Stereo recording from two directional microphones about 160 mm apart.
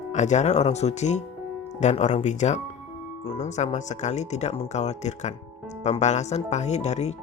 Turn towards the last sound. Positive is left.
turn(degrees=45)  # may be behind; listen again after turning